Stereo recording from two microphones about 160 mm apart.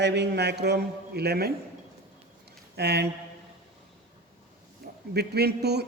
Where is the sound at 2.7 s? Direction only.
90° right.